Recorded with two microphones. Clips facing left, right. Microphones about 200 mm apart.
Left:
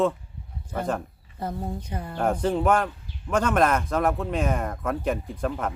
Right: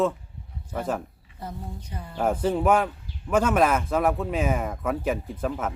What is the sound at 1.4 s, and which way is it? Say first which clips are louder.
Speech: left 6 dB; 65° left (ahead or behind).